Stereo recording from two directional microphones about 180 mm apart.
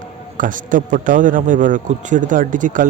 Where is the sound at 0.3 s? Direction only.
45° right (ahead or behind).